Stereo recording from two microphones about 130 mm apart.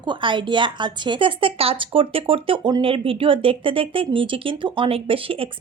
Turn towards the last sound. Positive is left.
turn(degrees=-45)  # may be behind; listen again after turning